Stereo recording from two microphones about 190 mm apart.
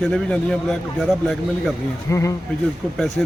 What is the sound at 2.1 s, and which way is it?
Speech, 15° left (ahead or behind).